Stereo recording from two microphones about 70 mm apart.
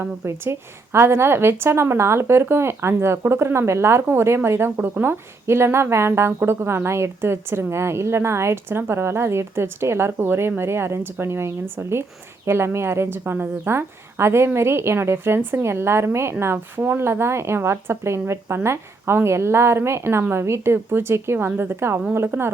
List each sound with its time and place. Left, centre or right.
0.2 s a woman's voice: right